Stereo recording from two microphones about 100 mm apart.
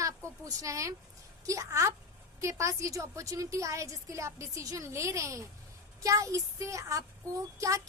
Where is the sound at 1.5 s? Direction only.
30° right (ahead or behind).